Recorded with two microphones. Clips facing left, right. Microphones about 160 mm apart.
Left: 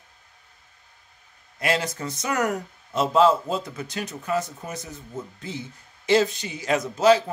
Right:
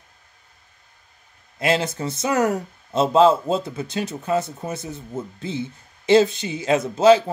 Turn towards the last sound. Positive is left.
turn(degrees=-25)  # may be behind; listen again after turning